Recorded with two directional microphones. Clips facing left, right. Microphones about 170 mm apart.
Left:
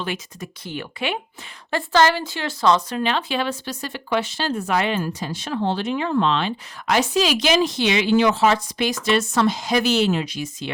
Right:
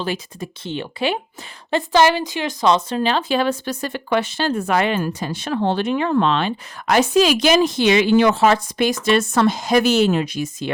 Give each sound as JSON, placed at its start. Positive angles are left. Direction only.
{"t": 0.0, "sound": "speech", "side_deg": -30}
{"t": 1.7, "sound": "speech", "side_deg": -15}
{"t": 2.9, "sound": "speech", "side_deg": -35}